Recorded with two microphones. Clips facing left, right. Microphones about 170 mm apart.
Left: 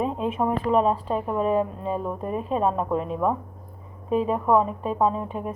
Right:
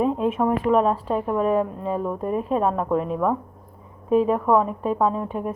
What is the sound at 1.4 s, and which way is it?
Speech, 25° left (ahead or behind).